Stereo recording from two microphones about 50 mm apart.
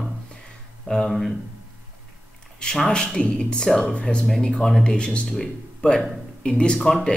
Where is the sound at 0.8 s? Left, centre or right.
Centre.